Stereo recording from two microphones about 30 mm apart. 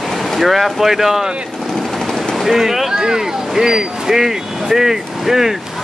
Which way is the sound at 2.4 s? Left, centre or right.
Centre.